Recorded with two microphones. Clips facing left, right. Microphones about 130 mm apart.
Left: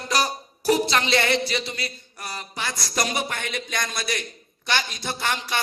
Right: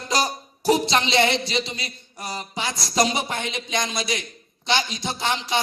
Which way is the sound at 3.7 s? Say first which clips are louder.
Right 4 dB; 15° right (ahead or behind).